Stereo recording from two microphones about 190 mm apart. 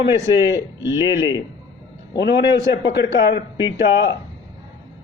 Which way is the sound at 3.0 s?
65° left (ahead or behind).